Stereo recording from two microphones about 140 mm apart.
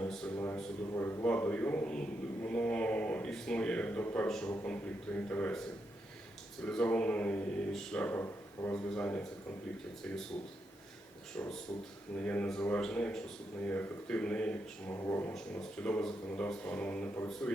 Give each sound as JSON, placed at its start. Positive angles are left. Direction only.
{"t": 0.3, "sound": "a man's voice", "side_deg": 15}
{"t": 6.7, "sound": "a man's voice", "side_deg": 5}
{"t": 11.3, "sound": "a man's voice", "side_deg": 5}
{"t": 15.0, "sound": "speech", "side_deg": 20}
{"t": 15.4, "sound": "a man's voice", "side_deg": 10}